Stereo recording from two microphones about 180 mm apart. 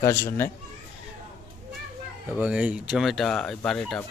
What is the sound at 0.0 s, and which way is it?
Speech, 15° left (ahead or behind).